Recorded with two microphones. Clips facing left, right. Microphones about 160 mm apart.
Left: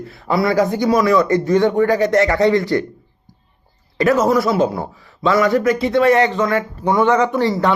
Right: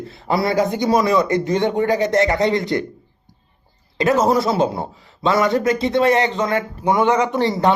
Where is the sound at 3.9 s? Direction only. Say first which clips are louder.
Left 1 dB; 25° right (ahead or behind).